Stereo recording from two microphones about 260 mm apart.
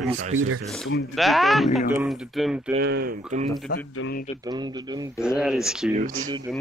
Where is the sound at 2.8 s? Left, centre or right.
Right.